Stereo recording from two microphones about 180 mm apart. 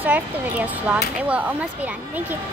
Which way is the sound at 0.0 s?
10° right (ahead or behind).